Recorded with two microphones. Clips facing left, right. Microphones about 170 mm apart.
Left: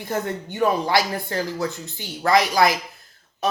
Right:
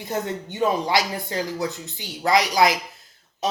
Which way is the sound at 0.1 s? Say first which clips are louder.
Left 1 dB; 20° right (ahead or behind).